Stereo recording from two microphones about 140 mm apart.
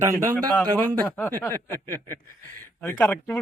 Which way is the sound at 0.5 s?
10° left (ahead or behind).